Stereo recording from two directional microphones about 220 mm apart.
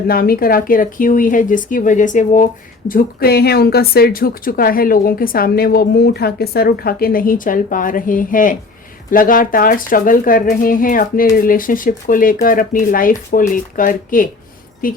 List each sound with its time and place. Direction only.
0.1 s speech: 45° left (ahead or behind)